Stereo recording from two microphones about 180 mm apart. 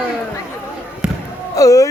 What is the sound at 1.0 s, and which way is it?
Basketball bounce, 5° right (ahead or behind).